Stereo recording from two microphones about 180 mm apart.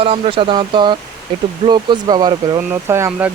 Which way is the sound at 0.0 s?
30° right (ahead or behind).